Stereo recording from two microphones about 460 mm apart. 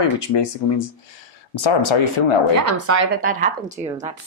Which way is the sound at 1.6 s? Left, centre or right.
Left.